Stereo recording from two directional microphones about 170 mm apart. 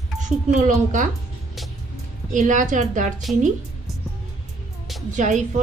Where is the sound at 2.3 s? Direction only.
50° right (ahead or behind).